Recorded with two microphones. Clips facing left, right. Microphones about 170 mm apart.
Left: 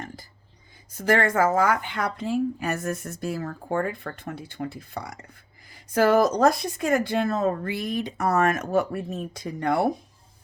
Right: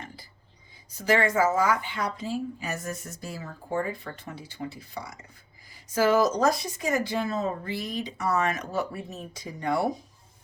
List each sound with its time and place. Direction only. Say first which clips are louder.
0.9 s speech: left 2 dB; 55° left (ahead or behind)